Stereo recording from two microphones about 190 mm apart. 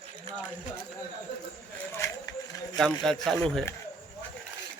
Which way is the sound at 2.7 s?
Centre (ahead or behind).